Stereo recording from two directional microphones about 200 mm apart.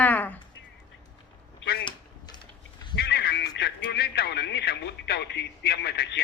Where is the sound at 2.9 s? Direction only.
55° left (ahead or behind).